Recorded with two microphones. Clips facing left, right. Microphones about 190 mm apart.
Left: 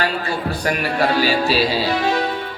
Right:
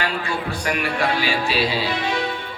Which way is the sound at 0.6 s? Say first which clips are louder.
Left 4 dB; 40° left (ahead or behind).